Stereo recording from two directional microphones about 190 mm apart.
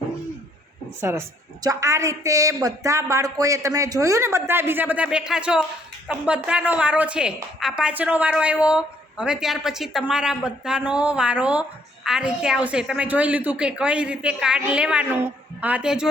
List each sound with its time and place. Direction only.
1.6 s a woman's voice: 15° right (ahead or behind)